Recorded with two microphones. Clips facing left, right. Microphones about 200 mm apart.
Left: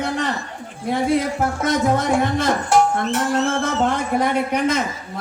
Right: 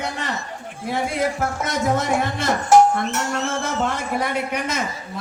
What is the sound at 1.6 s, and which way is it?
A man's voice, 55° left (ahead or behind).